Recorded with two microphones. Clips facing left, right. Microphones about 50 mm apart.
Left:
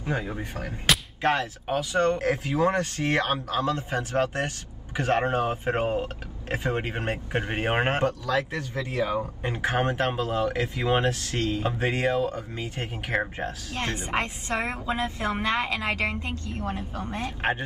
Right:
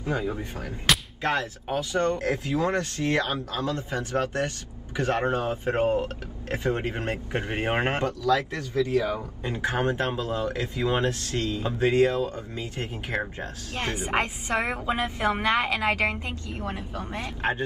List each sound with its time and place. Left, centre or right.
0.0 s speech: left
13.7 s a woman's voice: right
17.4 s speech: left